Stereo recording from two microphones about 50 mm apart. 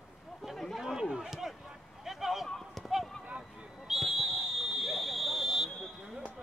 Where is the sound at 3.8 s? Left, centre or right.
Centre.